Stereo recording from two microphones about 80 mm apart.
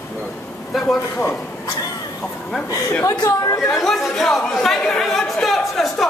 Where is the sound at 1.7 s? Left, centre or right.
Left.